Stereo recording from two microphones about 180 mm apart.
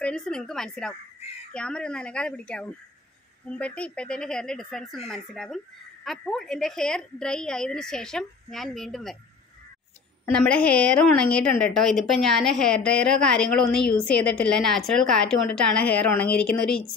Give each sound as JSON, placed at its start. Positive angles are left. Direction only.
{"t": 0.0, "sound": "a woman's voice", "side_deg": 5}
{"t": 10.3, "sound": "a woman's voice", "side_deg": 5}